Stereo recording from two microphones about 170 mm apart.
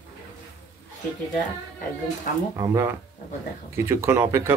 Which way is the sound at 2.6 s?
15° right (ahead or behind).